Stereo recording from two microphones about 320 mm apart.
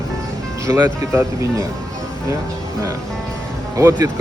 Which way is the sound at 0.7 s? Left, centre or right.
Centre.